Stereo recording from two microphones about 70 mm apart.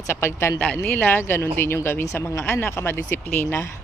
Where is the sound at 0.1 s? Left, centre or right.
Left.